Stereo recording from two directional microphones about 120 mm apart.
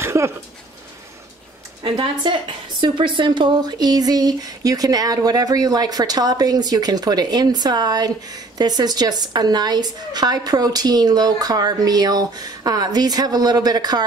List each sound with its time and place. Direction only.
0.0 s dog: 20° right (ahead or behind)
1.8 s a woman's voice: 40° right (ahead or behind)